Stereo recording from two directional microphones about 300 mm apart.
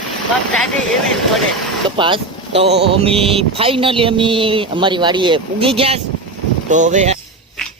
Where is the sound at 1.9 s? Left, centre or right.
Centre.